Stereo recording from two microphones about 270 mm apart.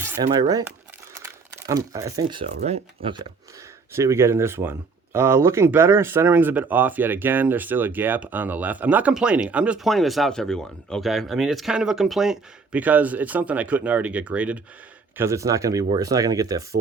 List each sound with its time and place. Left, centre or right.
0.0 s speech: centre
1.1 s crumpling: centre
2.6 s speech: right